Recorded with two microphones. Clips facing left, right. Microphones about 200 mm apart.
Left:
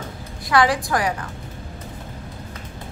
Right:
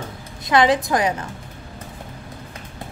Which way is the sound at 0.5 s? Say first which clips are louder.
Right 2 dB; 20° right (ahead or behind).